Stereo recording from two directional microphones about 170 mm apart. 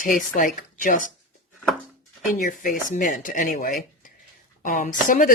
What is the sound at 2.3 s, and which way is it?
Speech, 50° left (ahead or behind).